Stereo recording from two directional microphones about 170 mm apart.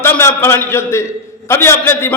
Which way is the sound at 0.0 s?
15° left (ahead or behind).